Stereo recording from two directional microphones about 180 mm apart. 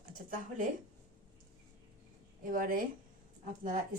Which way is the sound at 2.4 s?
50° right (ahead or behind).